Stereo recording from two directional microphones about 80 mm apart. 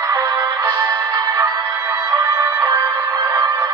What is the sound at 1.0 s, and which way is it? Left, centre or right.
Music, right.